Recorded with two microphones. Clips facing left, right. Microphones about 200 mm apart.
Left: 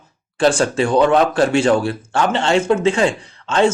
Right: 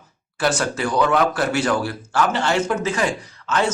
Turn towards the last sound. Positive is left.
turn(degrees=25)  # may be behind; listen again after turning